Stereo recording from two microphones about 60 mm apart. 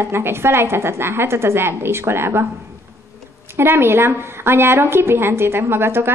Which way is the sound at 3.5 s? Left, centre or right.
Right.